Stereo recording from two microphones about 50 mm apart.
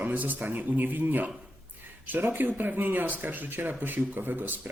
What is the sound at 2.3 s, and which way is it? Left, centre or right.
Speech, right.